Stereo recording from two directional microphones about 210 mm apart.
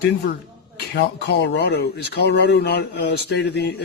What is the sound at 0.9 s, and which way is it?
Speech, 55° left (ahead or behind).